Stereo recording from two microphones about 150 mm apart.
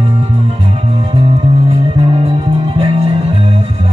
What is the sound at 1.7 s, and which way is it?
Music, 40° right (ahead or behind).